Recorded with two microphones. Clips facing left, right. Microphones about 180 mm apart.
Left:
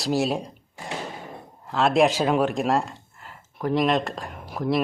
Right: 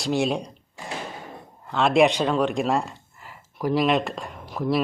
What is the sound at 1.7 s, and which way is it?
Speech, centre (ahead or behind).